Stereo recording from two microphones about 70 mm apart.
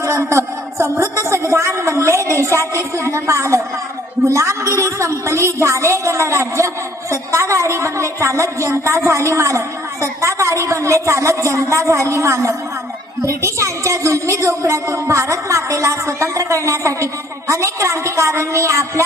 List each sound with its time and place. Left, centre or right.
0.0 s a woman's voice: right